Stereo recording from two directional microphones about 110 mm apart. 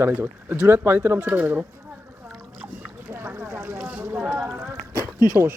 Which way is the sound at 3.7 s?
10° right (ahead or behind).